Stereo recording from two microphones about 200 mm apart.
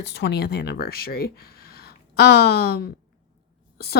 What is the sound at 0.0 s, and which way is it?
Speech, 60° left (ahead or behind).